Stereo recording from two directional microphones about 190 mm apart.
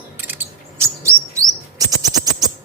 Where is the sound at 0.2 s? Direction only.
10° right (ahead or behind).